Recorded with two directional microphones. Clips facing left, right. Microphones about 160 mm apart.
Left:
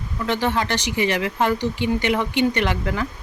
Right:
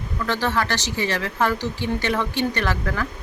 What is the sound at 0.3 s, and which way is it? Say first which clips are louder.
Speech: left 2 dB; 20° left (ahead or behind).